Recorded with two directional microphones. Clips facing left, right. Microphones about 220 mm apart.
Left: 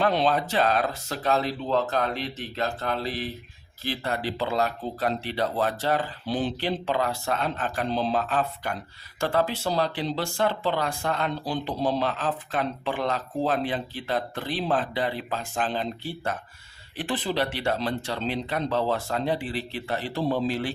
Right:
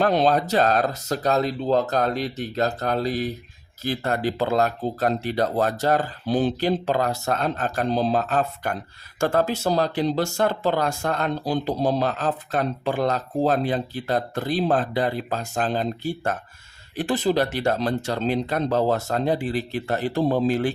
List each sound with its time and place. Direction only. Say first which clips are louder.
0.0 s speech: right 4 dB; 40° right (ahead or behind)